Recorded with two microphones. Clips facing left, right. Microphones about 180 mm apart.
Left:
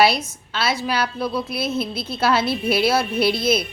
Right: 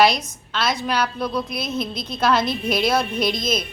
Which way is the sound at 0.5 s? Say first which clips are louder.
Even; 5° left (ahead or behind).